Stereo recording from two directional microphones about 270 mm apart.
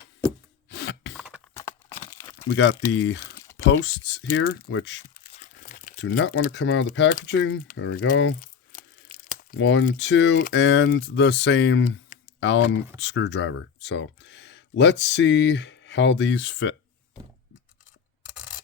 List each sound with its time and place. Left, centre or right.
0.7 s a sound: left
1.1 s a sound: centre
1.5 s crumpling: centre
2.5 s speech: left
5.2 s speech: left
7.8 s crumpling: left
9.6 s speech: left